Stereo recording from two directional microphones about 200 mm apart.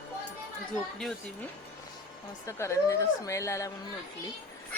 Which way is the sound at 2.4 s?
15° left (ahead or behind).